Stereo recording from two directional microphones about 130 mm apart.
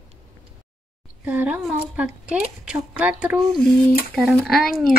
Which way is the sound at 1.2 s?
10° right (ahead or behind).